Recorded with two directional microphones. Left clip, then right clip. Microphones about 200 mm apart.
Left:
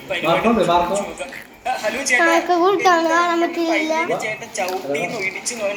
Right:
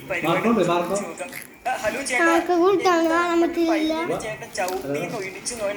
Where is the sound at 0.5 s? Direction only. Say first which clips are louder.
Left 5 dB; 25° right (ahead or behind).